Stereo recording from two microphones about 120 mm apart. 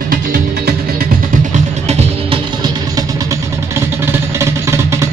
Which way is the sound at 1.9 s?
65° right (ahead or behind).